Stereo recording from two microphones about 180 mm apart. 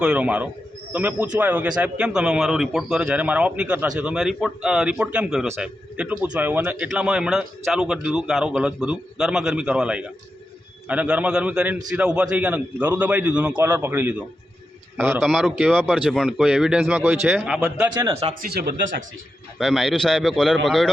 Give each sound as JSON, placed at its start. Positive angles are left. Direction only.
{"t": 0.0, "sound": "a man's voice", "side_deg": -5}
{"t": 15.2, "sound": "speech", "side_deg": 0}
{"t": 17.9, "sound": "a man's voice", "side_deg": -15}
{"t": 18.4, "sound": "speech", "side_deg": -60}
{"t": 19.5, "sound": "speech", "side_deg": 0}